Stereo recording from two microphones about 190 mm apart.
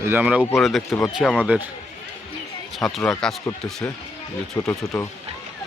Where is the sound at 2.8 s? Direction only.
5° left (ahead or behind).